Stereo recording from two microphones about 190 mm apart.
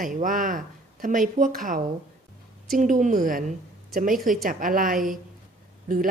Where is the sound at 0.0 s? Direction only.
45° right (ahead or behind).